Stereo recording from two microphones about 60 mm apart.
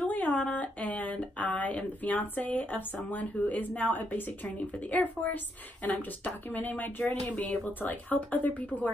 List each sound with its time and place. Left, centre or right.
0.0 s a woman's voice: left